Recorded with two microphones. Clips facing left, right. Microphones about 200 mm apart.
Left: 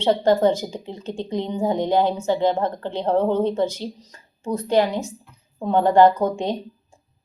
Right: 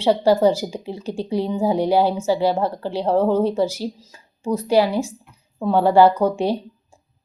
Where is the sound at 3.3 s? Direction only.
10° right (ahead or behind).